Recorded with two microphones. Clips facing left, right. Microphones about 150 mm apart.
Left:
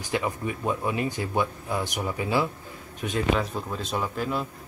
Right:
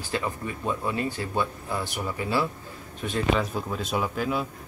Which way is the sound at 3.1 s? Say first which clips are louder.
Even; centre (ahead or behind).